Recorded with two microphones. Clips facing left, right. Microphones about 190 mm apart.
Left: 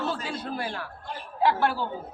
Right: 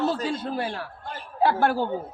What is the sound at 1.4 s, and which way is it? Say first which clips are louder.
Speech: right 3 dB; 50° right (ahead or behind).